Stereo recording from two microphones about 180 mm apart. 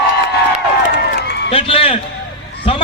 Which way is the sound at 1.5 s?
30° left (ahead or behind).